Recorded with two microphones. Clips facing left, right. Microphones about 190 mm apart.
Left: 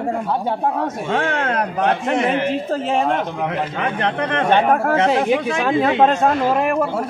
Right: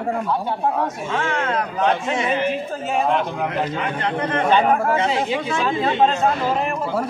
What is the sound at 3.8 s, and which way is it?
Speech, 65° left (ahead or behind).